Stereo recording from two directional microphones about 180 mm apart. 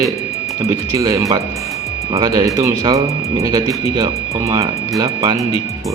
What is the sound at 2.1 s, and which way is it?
Mantra, 20° right (ahead or behind).